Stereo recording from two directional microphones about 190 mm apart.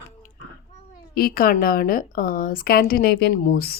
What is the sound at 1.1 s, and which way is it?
Speech, 50° left (ahead or behind).